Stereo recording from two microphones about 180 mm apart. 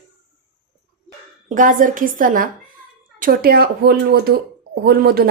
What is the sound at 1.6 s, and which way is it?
A woman's voice, 50° right (ahead or behind).